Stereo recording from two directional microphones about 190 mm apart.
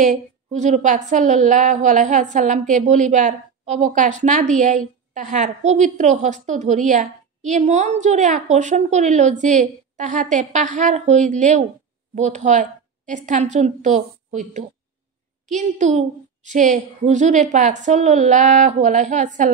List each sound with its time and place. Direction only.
0.0 s a woman's voice: 40° right (ahead or behind)